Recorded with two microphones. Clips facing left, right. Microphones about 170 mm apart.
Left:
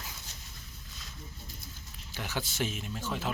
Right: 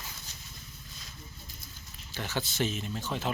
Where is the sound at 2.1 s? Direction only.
10° left (ahead or behind).